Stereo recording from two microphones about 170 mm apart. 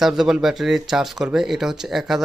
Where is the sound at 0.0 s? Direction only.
Centre (ahead or behind).